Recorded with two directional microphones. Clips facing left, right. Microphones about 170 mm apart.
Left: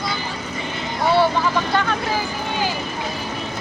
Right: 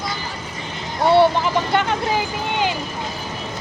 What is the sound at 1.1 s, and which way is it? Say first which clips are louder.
Vehicle: right 3 dB; 20° right (ahead or behind).